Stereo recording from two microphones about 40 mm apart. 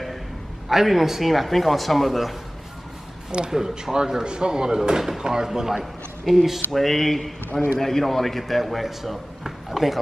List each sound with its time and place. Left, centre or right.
0.7 s speech: centre
3.3 s speech: centre